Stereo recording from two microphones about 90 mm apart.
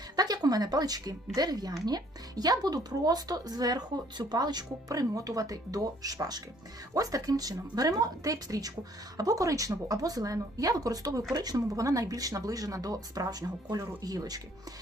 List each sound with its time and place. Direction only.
0.2 s a woman's voice: 45° right (ahead or behind)